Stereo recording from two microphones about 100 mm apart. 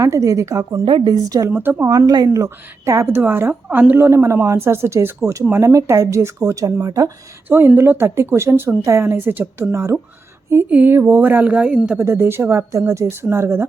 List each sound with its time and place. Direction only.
0.0 s a woman's voice: 30° right (ahead or behind)
0.9 s a woman's voice: 45° right (ahead or behind)
1.5 s speech: 20° right (ahead or behind)
1.9 s a woman's voice: 40° right (ahead or behind)
7.4 s speech: 20° right (ahead or behind)
11.9 s speech: 25° right (ahead or behind)